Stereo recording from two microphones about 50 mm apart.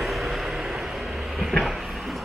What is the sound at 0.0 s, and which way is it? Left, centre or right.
Vehicle, centre.